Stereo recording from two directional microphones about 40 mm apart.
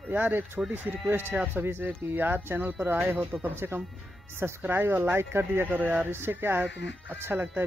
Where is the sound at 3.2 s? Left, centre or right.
Centre.